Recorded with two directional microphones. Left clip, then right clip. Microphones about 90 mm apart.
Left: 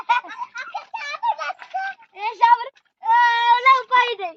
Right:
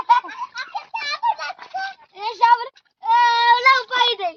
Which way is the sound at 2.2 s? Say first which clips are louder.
Even; 15° left (ahead or behind).